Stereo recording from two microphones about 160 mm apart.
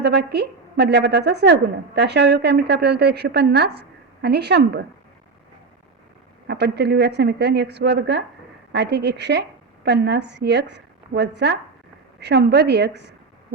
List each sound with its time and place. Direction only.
0.0 s a woman's voice: 90° right
6.5 s a woman's voice: 90° right